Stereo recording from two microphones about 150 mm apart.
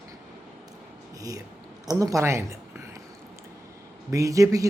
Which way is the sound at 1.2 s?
25° right (ahead or behind).